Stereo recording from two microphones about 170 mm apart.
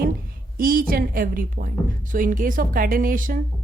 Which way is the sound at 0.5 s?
55° right (ahead or behind).